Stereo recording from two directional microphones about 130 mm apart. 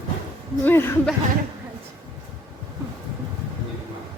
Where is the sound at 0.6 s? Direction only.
20° left (ahead or behind).